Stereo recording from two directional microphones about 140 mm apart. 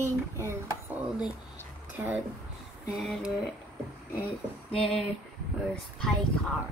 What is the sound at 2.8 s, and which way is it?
Speech, centre (ahead or behind).